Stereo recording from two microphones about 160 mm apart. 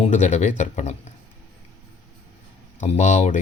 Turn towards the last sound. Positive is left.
turn(degrees=45)  # may be behind; listen again after turning